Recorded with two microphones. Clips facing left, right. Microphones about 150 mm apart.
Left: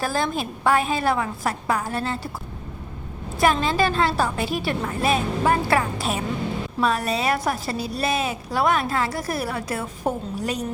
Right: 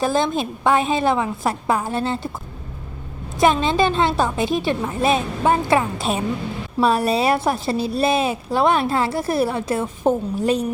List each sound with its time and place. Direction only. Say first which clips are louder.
0.0 s a woman's voice: right 5 dB; 20° right (ahead or behind)
3.4 s a woman's voice: right 3 dB; 25° right (ahead or behind)